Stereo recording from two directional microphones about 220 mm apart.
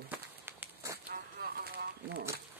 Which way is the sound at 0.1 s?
10° right (ahead or behind).